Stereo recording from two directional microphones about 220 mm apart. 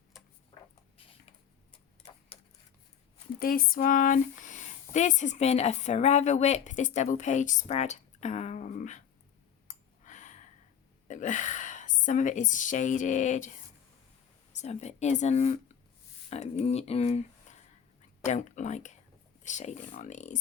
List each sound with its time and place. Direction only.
3.4 s speech: 40° left (ahead or behind)
9.6 s a sound: 35° left (ahead or behind)
11.1 s a woman's voice: 35° left (ahead or behind)
14.5 s speech: 30° left (ahead or behind)